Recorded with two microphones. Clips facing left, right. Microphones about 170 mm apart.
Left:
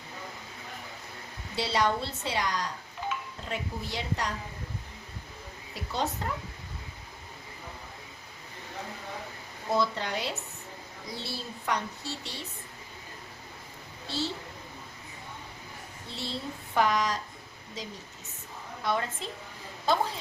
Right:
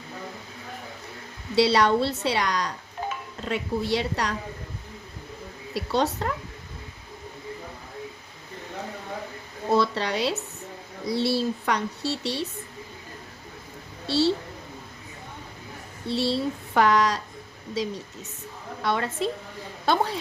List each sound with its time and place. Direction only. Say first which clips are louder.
1.5 s speech: right 8 dB; 75° right (ahead or behind)
5.7 s speech: right 7 dB; 75° right (ahead or behind)
9.7 s speech: right 5 dB; 75° right (ahead or behind)
14.1 s speech: right 11 dB; 75° right (ahead or behind)
16.0 s speech: right 12 dB; 75° right (ahead or behind)
18.8 s speech: right 5 dB; 70° right (ahead or behind)